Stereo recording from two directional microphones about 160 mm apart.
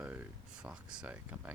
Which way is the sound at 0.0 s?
10° right (ahead or behind).